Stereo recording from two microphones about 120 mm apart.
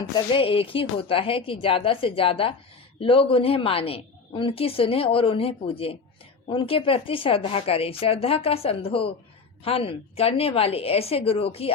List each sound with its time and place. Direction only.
0.0 s a woman's voice: 45° left (ahead or behind)